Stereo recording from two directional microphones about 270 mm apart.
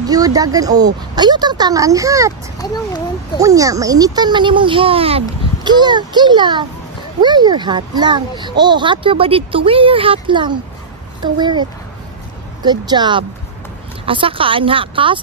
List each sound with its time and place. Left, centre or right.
0.0 s a child's voice: centre
2.6 s a child's voice: centre
3.3 s a child's voice: centre
12.6 s a child's voice: centre